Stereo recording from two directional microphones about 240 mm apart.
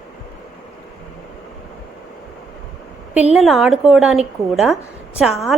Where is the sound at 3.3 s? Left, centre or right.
Centre.